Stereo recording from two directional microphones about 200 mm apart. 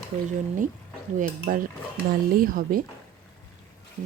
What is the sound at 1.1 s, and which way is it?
Speech, 45° right (ahead or behind).